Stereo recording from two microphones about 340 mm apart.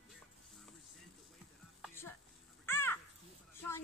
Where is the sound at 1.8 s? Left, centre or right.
Centre.